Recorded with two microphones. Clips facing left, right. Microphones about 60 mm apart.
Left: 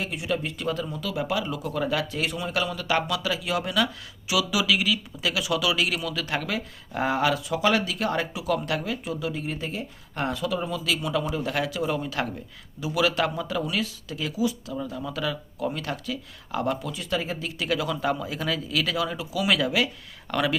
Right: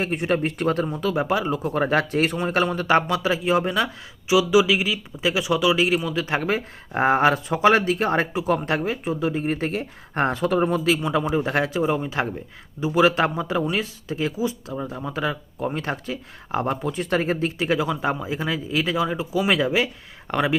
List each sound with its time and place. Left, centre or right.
0.0 s speech: right
10.8 s speech: right